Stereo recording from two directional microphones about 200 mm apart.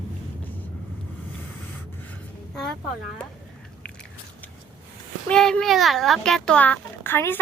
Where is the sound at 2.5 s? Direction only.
5° left (ahead or behind).